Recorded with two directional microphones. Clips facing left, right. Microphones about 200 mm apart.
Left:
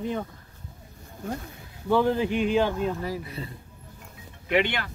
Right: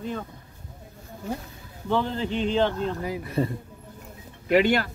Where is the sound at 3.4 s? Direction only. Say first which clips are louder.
Right 12 dB; 50° right (ahead or behind).